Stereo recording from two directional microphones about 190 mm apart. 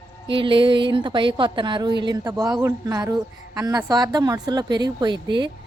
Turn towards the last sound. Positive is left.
turn(degrees=-25)  # may be behind; listen again after turning